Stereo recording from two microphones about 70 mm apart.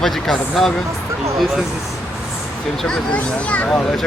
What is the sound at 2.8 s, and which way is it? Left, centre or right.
Speech, centre.